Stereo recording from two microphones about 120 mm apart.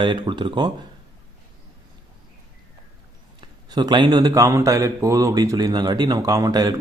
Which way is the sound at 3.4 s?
35° right (ahead or behind).